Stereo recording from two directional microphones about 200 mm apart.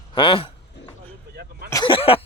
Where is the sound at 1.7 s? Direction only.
20° left (ahead or behind).